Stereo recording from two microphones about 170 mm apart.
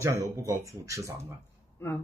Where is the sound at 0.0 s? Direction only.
20° right (ahead or behind).